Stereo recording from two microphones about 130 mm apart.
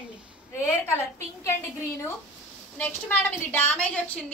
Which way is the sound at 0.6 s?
20° left (ahead or behind).